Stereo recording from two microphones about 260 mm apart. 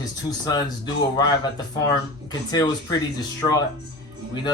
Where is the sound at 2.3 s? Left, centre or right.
Centre.